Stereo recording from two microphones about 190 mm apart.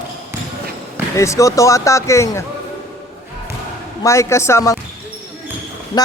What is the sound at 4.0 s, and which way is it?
Speech, 15° left (ahead or behind).